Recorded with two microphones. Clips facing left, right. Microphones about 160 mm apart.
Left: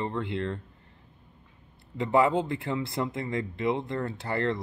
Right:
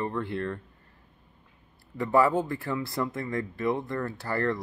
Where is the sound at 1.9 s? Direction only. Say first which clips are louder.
Even; 20° left (ahead or behind).